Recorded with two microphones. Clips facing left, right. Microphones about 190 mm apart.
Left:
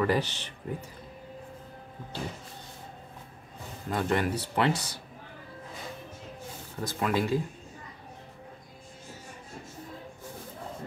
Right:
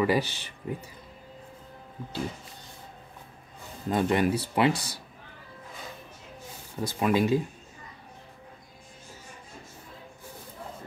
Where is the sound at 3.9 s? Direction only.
15° right (ahead or behind).